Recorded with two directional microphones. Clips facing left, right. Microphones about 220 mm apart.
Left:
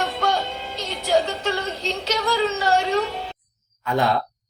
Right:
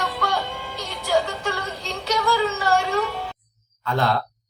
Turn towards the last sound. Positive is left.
turn(degrees=15)  # may be behind; listen again after turning